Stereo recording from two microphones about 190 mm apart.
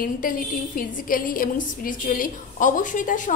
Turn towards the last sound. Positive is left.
turn(degrees=45)  # may be behind; listen again after turning